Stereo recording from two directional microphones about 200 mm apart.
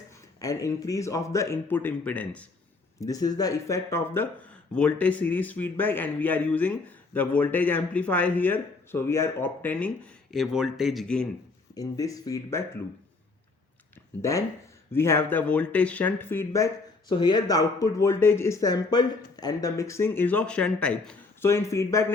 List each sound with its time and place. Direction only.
0.3 s speech: 15° left (ahead or behind)
3.0 s speech: 20° left (ahead or behind); by 11.3 s centre (ahead or behind)
11.7 s speech: 15° left (ahead or behind)
14.2 s speech: 15° left (ahead or behind)